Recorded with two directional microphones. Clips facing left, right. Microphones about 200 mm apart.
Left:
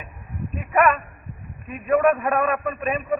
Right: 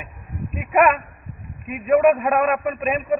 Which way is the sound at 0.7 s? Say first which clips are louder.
Right 2 dB; 15° right (ahead or behind).